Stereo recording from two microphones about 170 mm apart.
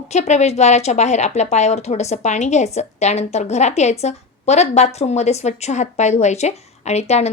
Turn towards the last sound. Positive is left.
turn(degrees=40)  # may be behind; listen again after turning